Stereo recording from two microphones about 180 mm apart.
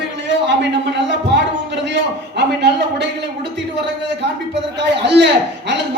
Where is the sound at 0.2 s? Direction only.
75° right (ahead or behind).